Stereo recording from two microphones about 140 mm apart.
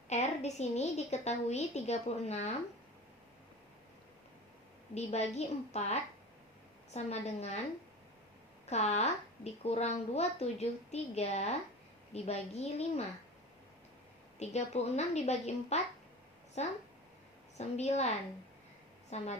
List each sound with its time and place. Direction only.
0.1 s speech: 55° left (ahead or behind)
4.9 s speech: 50° left (ahead or behind)
8.7 s speech: 50° left (ahead or behind)
14.3 s speech: 50° left (ahead or behind)
19.1 s speech: 50° left (ahead or behind)